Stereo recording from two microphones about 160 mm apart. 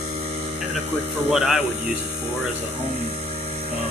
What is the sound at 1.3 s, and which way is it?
Speech, 5° right (ahead or behind).